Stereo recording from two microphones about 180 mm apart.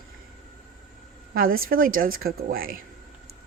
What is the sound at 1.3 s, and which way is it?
A woman's voice, 55° right (ahead or behind).